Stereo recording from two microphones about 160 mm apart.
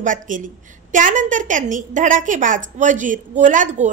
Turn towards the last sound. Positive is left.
turn(degrees=-50)  # may be behind; listen again after turning